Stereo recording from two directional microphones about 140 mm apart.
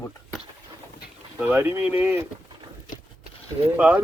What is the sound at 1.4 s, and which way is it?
Speech, 15° right (ahead or behind).